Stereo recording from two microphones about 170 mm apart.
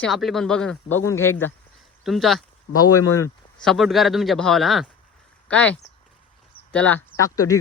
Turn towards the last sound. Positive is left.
turn(degrees=20)  # may be behind; listen again after turning